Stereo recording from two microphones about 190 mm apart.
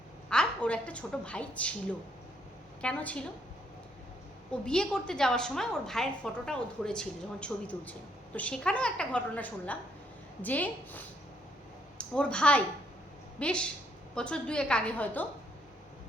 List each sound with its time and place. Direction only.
0.3 s a woman's voice: 5° left (ahead or behind)
2.8 s a woman's voice: 5° left (ahead or behind)
4.6 s a woman's voice: 5° left (ahead or behind)